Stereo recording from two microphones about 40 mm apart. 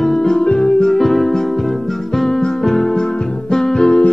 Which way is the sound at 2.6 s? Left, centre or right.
Centre.